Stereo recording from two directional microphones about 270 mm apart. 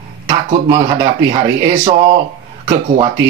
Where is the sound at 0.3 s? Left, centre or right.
Centre.